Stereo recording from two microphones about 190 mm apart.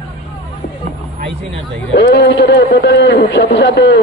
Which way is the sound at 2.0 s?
65° left (ahead or behind).